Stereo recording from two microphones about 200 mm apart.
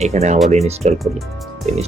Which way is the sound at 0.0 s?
35° right (ahead or behind).